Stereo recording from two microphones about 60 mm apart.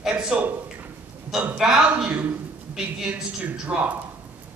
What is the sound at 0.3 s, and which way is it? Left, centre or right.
Speech, centre.